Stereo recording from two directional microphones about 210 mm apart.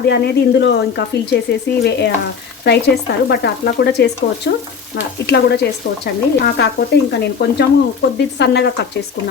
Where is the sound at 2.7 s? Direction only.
55° left (ahead or behind).